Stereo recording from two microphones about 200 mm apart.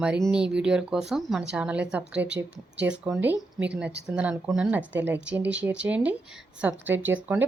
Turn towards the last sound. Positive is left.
turn(degrees=-10)  # may be behind; listen again after turning